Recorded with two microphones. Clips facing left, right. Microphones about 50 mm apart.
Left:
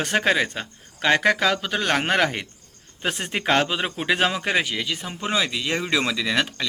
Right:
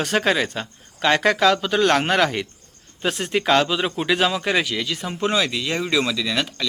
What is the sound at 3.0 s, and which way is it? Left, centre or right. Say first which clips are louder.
Speech: right 3 dB; left.